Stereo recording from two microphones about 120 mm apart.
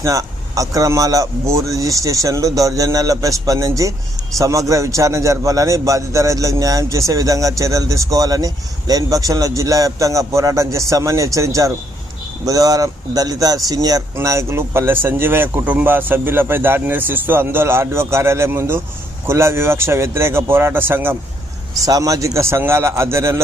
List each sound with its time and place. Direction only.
0.0 s a man's voice: 30° right (ahead or behind)
21.8 s a man's voice: 30° right (ahead or behind)